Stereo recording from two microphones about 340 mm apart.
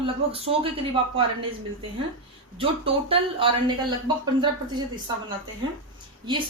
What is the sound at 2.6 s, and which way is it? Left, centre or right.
Speech, centre.